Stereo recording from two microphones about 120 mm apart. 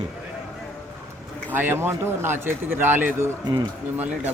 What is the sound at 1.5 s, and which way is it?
Speech, 15° right (ahead or behind).